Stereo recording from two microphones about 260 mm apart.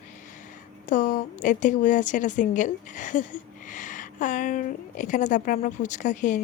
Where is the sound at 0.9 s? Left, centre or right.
Left.